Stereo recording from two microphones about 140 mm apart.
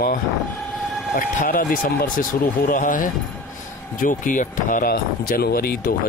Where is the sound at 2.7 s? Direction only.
75° left (ahead or behind); by 5.7 s 90° left.